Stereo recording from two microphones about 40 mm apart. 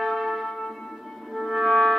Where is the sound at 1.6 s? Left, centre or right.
Centre.